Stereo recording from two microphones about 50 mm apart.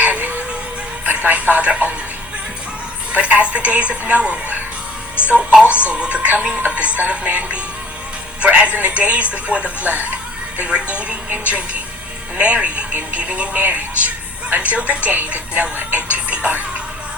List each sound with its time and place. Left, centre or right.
0.0 s music: right
3.1 s a woman's voice: right